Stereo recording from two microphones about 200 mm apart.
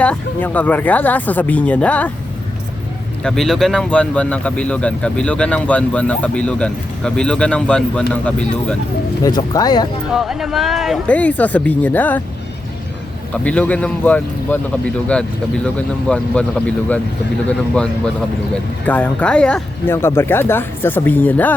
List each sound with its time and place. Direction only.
0.0 s speech: 10° left (ahead or behind)
3.2 s speech: centre (ahead or behind)
9.2 s speech: 20° left (ahead or behind)
10.1 s speech: centre (ahead or behind)
13.3 s speech: 5° left (ahead or behind)
18.9 s speech: 5° left (ahead or behind)